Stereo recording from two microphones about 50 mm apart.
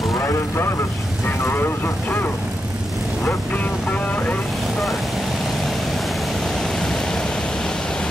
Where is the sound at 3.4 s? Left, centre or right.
Left.